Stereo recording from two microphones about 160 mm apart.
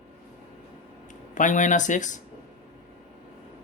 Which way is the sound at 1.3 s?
50° left (ahead or behind).